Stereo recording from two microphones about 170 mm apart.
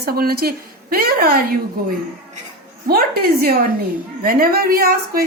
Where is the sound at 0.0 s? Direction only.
65° right (ahead or behind).